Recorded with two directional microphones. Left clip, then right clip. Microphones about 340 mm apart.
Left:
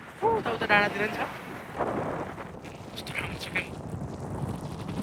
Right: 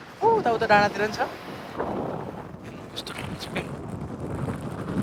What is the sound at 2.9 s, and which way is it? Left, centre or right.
Vehicle, centre.